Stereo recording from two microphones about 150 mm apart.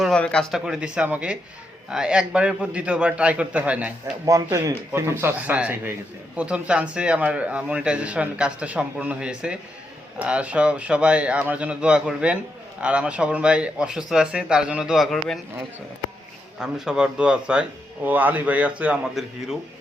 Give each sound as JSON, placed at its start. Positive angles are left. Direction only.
{"t": 0.0, "sound": "speech", "side_deg": 5}
{"t": 0.6, "sound": "a man's voice", "side_deg": -5}
{"t": 4.3, "sound": "a man's voice", "side_deg": -20}
{"t": 16.6, "sound": "a man's voice", "side_deg": -5}